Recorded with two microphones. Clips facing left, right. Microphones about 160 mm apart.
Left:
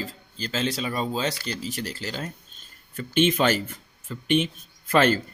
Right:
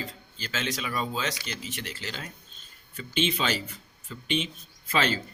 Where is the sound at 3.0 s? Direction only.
50° left (ahead or behind).